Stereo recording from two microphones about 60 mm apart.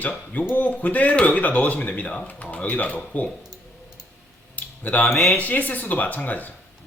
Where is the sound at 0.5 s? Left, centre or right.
Left.